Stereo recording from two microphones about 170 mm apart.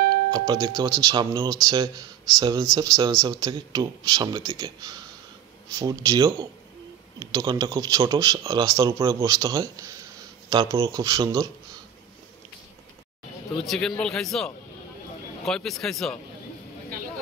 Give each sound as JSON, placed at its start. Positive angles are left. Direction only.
{"t": 0.3, "sound": "speech", "side_deg": -20}
{"t": 13.7, "sound": "speech", "side_deg": 5}